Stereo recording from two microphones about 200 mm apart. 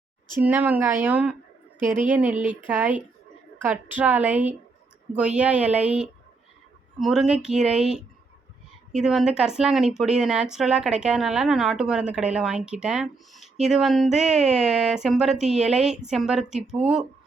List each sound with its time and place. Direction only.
0.3 s a woman's voice: 10° right (ahead or behind)
1.8 s a woman's voice: 40° right (ahead or behind)
2.0 s a woman's voice: 5° right (ahead or behind)
9.0 s speech: 5° right (ahead or behind)